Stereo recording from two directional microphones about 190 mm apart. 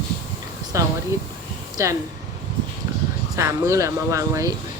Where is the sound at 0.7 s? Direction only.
15° right (ahead or behind).